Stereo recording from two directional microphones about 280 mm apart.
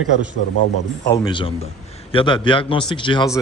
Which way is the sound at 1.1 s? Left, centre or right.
Centre.